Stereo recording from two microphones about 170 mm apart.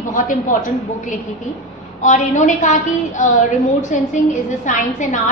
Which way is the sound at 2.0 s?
45° left (ahead or behind).